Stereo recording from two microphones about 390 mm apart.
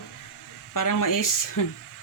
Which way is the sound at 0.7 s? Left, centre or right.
Left.